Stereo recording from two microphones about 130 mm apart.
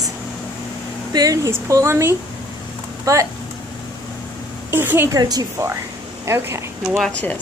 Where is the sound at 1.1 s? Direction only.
25° right (ahead or behind).